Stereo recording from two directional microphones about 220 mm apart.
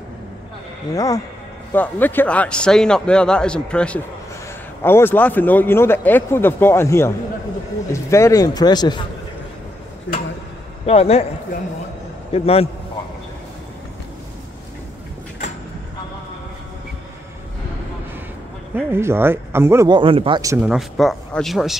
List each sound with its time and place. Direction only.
0.9 s speech: 15° left (ahead or behind)
10.9 s speech: 25° left (ahead or behind)
12.3 s speech: 25° left (ahead or behind)
18.9 s speech: 10° right (ahead or behind)